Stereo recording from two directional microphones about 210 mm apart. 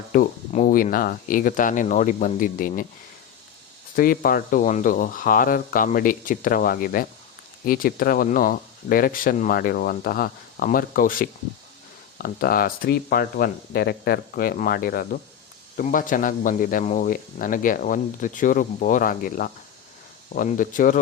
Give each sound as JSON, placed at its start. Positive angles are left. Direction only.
{"t": 0.1, "sound": "speech", "side_deg": 40}
{"t": 3.9, "sound": "speech", "side_deg": 45}